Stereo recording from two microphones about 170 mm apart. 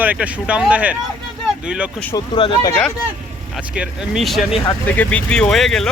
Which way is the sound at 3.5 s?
5° right (ahead or behind).